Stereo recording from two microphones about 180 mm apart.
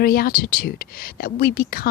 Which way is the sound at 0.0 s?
55° left (ahead or behind).